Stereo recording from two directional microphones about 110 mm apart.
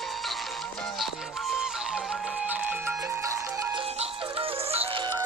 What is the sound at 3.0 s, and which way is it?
Music, 30° right (ahead or behind).